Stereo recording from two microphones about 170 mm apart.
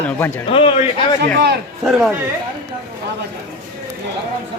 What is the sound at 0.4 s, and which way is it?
Speech, 30° left (ahead or behind).